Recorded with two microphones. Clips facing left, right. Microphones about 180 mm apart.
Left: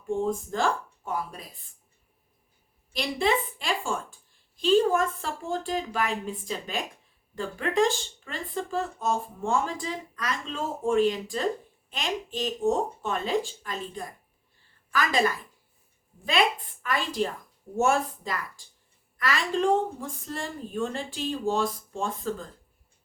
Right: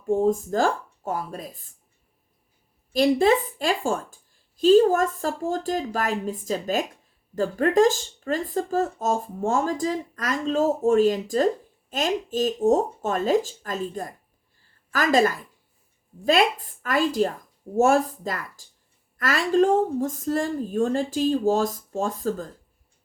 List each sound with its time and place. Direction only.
0.1 s speech: 40° right (ahead or behind)
2.9 s speech: 40° right (ahead or behind)
16.8 s a woman's voice: 40° right (ahead or behind)